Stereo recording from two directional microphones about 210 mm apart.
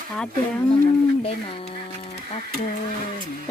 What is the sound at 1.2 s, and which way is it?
Speech, 25° left (ahead or behind).